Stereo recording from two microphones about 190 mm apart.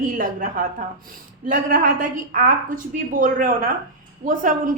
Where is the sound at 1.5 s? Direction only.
45° right (ahead or behind).